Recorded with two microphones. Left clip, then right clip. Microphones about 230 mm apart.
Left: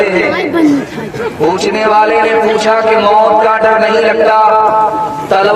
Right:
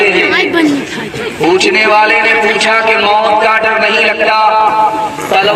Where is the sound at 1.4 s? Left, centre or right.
Left.